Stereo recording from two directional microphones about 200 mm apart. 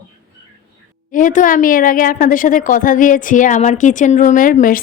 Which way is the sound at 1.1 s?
40° left (ahead or behind).